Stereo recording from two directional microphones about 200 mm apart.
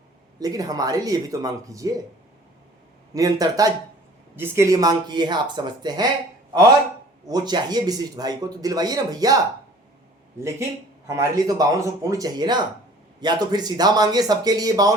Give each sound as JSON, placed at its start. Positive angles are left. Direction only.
{"t": 0.3, "sound": "a man's voice", "side_deg": -20}
{"t": 3.2, "sound": "speech", "side_deg": -20}
{"t": 10.4, "sound": "a man's voice", "side_deg": -15}